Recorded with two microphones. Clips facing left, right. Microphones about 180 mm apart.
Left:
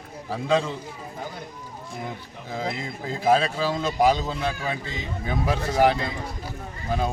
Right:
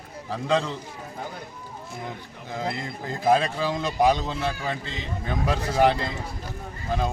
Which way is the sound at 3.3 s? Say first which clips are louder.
Left 1 dB; 10° left (ahead or behind).